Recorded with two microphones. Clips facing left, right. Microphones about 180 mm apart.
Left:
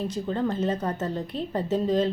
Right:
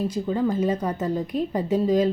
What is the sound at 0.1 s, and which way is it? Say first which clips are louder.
A woman's voice: right 3 dB; 10° right (ahead or behind).